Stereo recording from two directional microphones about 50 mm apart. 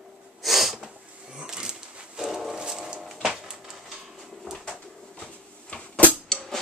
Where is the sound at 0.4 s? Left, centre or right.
Centre.